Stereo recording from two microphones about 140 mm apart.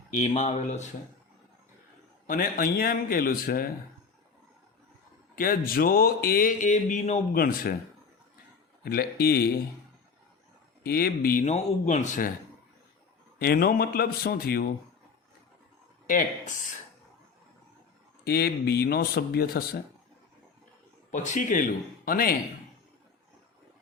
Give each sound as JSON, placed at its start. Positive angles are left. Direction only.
{"t": 0.2, "sound": "speech", "side_deg": 50}
{"t": 2.2, "sound": "speech", "side_deg": 90}
{"t": 5.4, "sound": "speech", "side_deg": 90}
{"t": 7.3, "sound": "speech", "side_deg": 90}
{"t": 8.8, "sound": "speech", "side_deg": 90}
{"t": 10.8, "sound": "speech", "side_deg": 90}
{"t": 11.4, "sound": "speech", "side_deg": 55}
{"t": 13.4, "sound": "speech", "side_deg": 90}
{"t": 16.0, "sound": "a man's voice", "side_deg": 70}
{"t": 18.3, "sound": "speech", "side_deg": 90}
{"t": 21.1, "sound": "a man's voice", "side_deg": 65}